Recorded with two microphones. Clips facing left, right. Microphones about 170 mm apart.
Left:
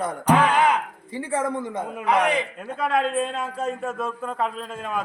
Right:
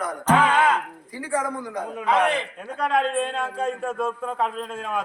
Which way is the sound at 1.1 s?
25° left (ahead or behind).